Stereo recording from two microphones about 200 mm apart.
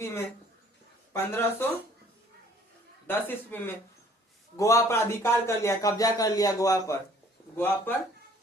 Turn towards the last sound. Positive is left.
turn(degrees=10)  # may be behind; listen again after turning